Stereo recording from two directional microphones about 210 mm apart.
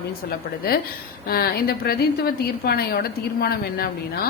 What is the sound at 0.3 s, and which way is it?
A woman's voice, 45° left (ahead or behind).